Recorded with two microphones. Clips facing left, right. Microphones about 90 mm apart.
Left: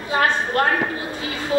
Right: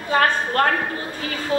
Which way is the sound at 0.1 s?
45° right (ahead or behind).